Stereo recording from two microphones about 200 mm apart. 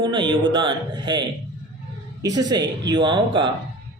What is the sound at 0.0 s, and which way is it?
Speech, 20° right (ahead or behind).